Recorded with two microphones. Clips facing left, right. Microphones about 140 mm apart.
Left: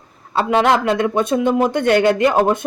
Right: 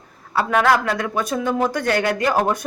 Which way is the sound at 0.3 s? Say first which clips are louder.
Left 2 dB; 25° left (ahead or behind).